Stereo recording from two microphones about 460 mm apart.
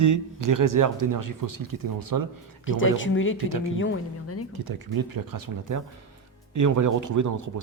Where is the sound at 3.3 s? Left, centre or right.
Right.